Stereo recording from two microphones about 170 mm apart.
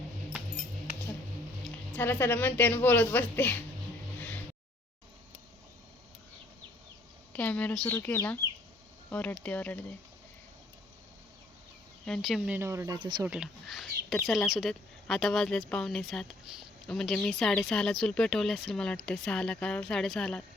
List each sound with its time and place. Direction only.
1.6 s a woman's voice: 10° left (ahead or behind)
7.3 s a woman's voice: 10° left (ahead or behind)
12.0 s speech: centre (ahead or behind)
12.5 s speech: 15° right (ahead or behind)
13.2 s speech: 5° right (ahead or behind)